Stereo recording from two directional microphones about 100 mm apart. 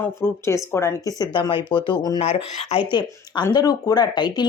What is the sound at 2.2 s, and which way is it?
Speech, 80° left.